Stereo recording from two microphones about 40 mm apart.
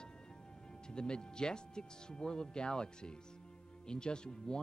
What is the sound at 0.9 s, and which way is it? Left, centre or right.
Speech, left.